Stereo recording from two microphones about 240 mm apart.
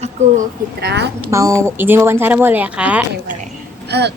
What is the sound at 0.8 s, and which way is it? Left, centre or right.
Speech, right.